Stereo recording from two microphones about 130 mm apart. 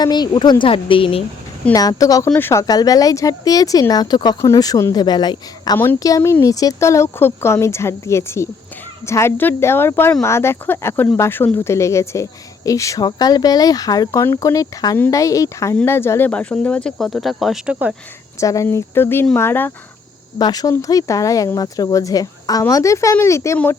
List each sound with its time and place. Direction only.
0.0 s speech: 35° left (ahead or behind)
1.7 s speech: 30° left (ahead or behind)
5.7 s speech: 20° left (ahead or behind); by 17.7 s centre (ahead or behind)
18.3 s speech: 25° left (ahead or behind)
20.4 s speech: 30° left (ahead or behind)